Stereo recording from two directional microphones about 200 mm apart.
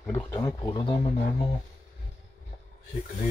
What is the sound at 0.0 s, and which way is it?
Speech, 15° left (ahead or behind).